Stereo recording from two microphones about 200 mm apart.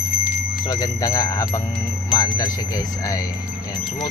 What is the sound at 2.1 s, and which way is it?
Bell, 20° left (ahead or behind).